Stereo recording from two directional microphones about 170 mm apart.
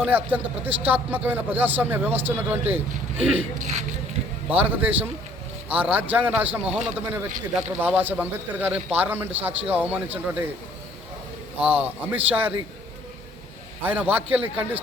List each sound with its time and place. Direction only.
0.0 s a man's voice: 10° right (ahead or behind)
4.6 s a man's voice: 10° right (ahead or behind)
11.8 s a man's voice: 10° right (ahead or behind)
13.8 s a man's voice: 10° right (ahead or behind)